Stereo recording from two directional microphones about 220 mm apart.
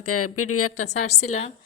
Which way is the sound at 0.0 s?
90° left.